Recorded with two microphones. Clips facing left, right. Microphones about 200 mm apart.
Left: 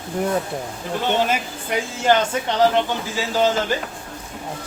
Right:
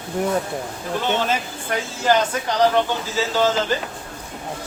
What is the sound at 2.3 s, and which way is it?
Speech, 20° left (ahead or behind).